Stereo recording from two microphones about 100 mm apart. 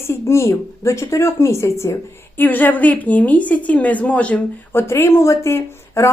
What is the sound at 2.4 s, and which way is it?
A woman's voice, 20° left (ahead or behind).